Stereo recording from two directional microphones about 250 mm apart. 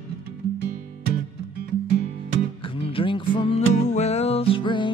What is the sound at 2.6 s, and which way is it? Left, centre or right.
Music, left.